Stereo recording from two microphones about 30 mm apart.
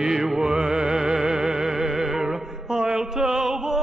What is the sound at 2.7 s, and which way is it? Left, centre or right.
Music, right.